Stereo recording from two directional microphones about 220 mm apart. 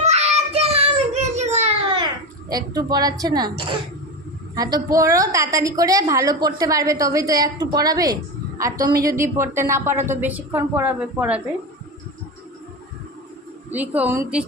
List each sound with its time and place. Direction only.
0.0 s child singing: 30° right (ahead or behind)
2.5 s a woman's voice: 15° right (ahead or behind)
13.7 s a woman's voice: 5° right (ahead or behind)